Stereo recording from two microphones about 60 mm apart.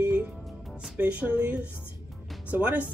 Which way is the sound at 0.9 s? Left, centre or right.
Right.